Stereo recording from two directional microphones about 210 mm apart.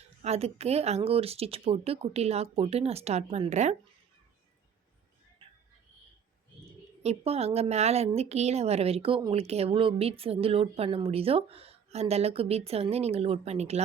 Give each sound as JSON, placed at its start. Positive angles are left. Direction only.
{"t": 0.2, "sound": "a woman's voice", "side_deg": -30}
{"t": 5.4, "sound": "a sound", "side_deg": -25}
{"t": 7.0, "sound": "a woman's voice", "side_deg": -30}